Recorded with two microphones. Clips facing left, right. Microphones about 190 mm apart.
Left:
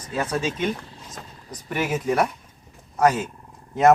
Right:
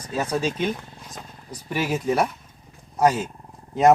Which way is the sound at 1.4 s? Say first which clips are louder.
Even; 10° right (ahead or behind).